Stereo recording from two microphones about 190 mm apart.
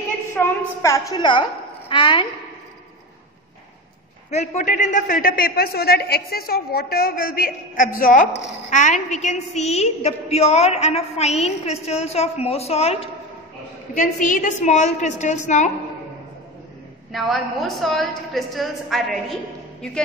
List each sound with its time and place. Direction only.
0.4 s a woman's voice: 15° left (ahead or behind)
4.3 s a man's voice: 40° left (ahead or behind)
13.9 s a woman's voice: 45° left (ahead or behind)
17.1 s a woman's voice: centre (ahead or behind)